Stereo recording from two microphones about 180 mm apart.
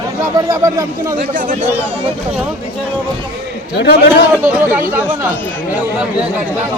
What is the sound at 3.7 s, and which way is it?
Speech, 70° left (ahead or behind).